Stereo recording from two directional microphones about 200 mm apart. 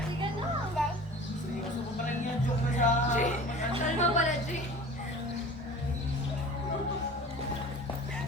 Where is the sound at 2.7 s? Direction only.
40° left (ahead or behind).